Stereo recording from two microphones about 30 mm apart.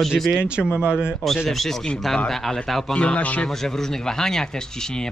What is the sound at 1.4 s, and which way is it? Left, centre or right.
Speech, centre.